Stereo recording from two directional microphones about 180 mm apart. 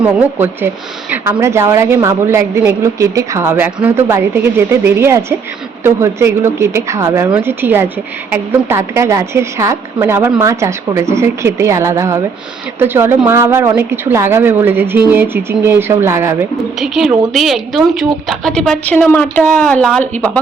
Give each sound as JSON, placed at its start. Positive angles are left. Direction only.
{"t": 0.0, "sound": "a woman's voice", "side_deg": -10}
{"t": 16.8, "sound": "a woman's voice", "side_deg": 0}